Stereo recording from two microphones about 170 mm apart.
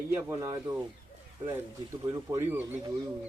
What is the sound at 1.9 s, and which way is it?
Speech, 15° right (ahead or behind).